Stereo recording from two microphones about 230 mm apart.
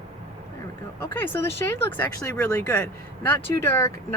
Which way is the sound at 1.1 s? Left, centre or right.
Centre.